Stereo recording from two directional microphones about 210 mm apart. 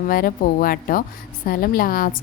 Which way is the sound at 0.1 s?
45° left (ahead or behind).